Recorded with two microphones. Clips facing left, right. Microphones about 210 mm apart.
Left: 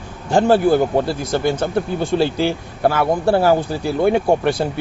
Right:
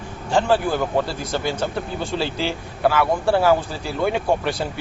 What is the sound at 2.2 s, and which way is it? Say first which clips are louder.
Speech: left 7 dB; 50° left (ahead or behind).